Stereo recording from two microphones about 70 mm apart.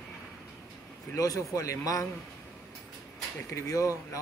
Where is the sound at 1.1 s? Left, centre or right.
Left.